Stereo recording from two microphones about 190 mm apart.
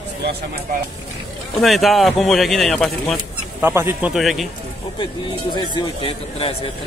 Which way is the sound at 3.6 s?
10° right (ahead or behind).